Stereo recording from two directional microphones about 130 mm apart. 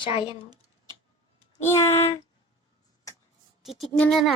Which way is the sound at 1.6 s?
20° left (ahead or behind).